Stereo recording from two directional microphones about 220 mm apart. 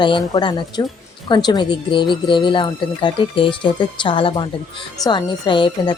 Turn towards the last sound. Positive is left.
turn(degrees=20)  # may be behind; listen again after turning